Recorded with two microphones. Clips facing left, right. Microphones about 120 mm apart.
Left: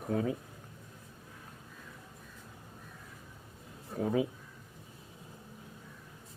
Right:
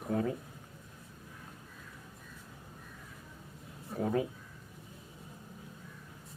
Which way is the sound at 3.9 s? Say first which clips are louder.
Left 1 dB; centre (ahead or behind).